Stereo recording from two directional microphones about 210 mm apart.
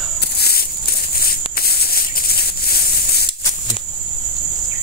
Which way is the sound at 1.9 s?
45° left (ahead or behind).